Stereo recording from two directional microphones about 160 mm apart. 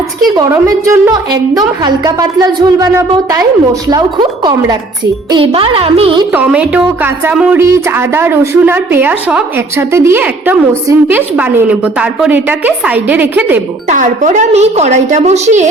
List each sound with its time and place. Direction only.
0.3 s a woman's voice: 15° right (ahead or behind); by 6.1 s 35° right (ahead or behind)
6.3 s a woman's voice: 10° right (ahead or behind)
13.8 s a woman's voice: 50° right (ahead or behind)